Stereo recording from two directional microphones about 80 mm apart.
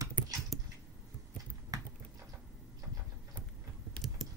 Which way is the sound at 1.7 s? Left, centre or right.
Right.